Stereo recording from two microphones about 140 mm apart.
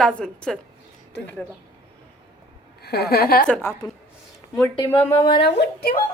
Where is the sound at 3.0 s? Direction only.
90° left.